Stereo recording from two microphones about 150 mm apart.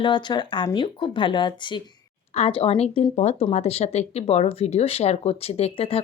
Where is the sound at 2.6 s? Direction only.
40° left (ahead or behind).